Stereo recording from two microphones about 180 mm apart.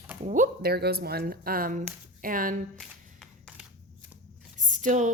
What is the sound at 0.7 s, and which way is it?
Speech, 60° right (ahead or behind).